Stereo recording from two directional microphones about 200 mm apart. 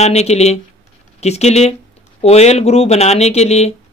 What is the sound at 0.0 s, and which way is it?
Speech, 30° left (ahead or behind).